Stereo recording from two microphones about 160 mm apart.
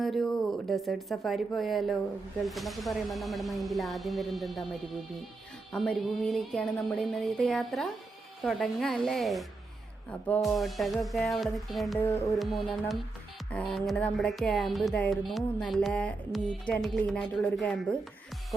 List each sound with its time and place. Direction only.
0.0 s speech: centre (ahead or behind)
11.9 s music: 15° left (ahead or behind)
12.3 s speech: centre (ahead or behind)